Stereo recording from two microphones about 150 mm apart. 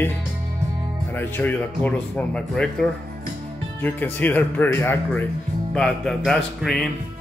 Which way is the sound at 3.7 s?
15° left (ahead or behind).